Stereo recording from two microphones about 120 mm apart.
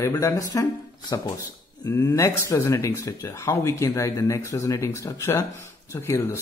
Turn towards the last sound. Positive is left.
turn(degrees=20)  # may be behind; listen again after turning